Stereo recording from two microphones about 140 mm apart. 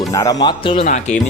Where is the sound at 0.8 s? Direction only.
55° left (ahead or behind).